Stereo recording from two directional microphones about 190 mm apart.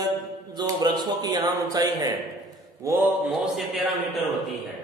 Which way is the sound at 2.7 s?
15° right (ahead or behind).